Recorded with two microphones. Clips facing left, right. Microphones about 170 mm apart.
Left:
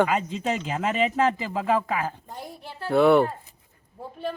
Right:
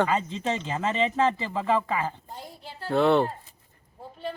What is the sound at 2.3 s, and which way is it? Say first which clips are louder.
Speech: left 3 dB; 60° left (ahead or behind).